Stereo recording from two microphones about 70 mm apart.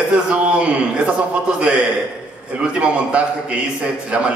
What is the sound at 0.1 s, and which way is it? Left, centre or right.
Speech, centre.